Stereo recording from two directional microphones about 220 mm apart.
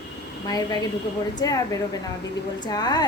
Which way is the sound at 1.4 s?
15° left (ahead or behind).